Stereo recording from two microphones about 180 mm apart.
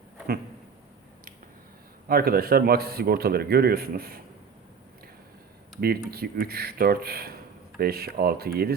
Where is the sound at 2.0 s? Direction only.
55° right (ahead or behind).